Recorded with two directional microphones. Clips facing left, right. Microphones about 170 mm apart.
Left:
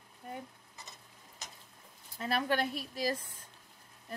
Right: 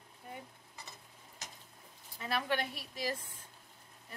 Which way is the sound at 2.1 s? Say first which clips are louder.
Left 3 dB; 40° left (ahead or behind).